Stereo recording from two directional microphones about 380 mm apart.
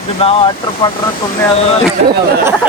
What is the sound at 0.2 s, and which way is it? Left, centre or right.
Speech, centre.